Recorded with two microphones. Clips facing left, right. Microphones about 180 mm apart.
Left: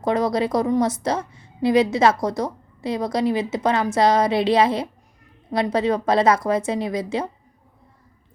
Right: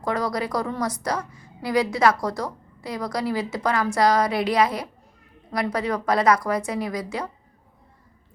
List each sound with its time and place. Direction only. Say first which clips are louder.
0.0 s a woman's voice: left 5 dB; 20° left (ahead or behind)